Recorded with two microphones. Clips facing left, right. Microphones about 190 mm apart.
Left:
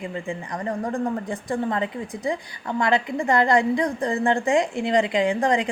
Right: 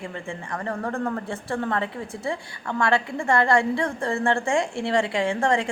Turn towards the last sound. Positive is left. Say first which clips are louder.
# left 2 dB
turn(degrees=15)  # may be behind; listen again after turning